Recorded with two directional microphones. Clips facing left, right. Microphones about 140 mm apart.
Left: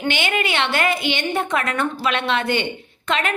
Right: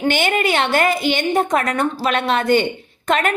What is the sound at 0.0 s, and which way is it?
A woman's voice, 45° right (ahead or behind).